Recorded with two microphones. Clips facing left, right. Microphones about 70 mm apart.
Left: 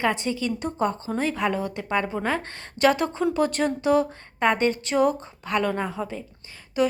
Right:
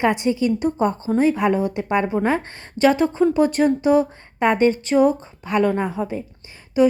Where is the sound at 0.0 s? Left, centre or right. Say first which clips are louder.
Right 6 dB; centre.